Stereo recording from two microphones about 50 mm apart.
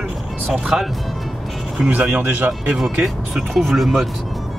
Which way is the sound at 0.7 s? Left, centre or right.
Centre.